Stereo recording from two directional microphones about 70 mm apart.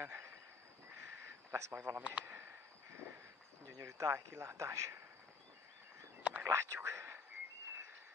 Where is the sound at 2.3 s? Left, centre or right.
Right.